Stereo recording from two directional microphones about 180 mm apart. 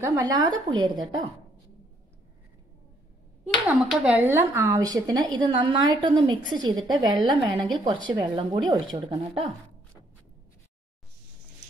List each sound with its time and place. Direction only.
0.0 s speech: 20° right (ahead or behind)
3.5 s speech: 5° right (ahead or behind); by 9.2 s 25° right (ahead or behind)